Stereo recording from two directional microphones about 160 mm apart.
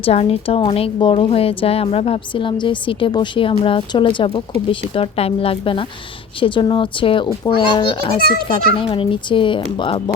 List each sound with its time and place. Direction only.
0.0 s a woman's voice: 40° left (ahead or behind)